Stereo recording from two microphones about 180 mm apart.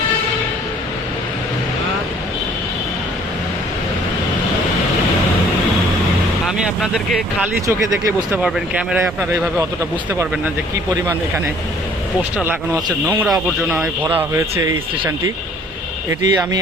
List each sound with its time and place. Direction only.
6.6 s speech: 5° right (ahead or behind)
13.1 s speech: 5° right (ahead or behind)
16.2 s speech: 20° right (ahead or behind)